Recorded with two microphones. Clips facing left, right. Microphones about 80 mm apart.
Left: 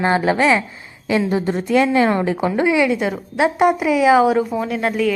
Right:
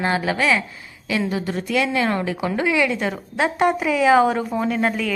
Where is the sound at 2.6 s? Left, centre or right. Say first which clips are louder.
Left 3 dB; centre.